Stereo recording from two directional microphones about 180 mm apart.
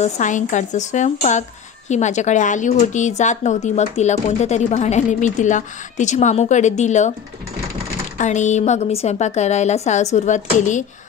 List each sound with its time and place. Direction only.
0.0 s a woman's voice: 45° left (ahead or behind)
8.2 s a woman's voice: 40° left (ahead or behind)